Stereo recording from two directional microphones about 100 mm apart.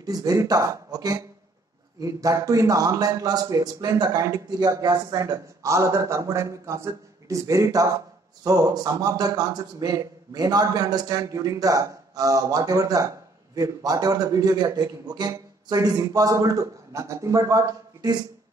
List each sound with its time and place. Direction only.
0.0 s speech: 40° right (ahead or behind)